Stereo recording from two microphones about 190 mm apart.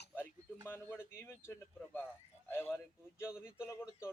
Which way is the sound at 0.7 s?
10° left (ahead or behind).